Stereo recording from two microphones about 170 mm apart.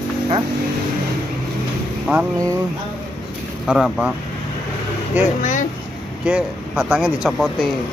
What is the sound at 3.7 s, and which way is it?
Speech, 5° right (ahead or behind).